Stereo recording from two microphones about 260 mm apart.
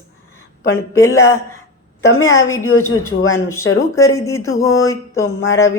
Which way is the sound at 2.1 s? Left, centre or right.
Left.